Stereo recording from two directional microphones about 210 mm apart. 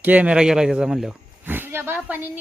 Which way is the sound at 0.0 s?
5° right (ahead or behind).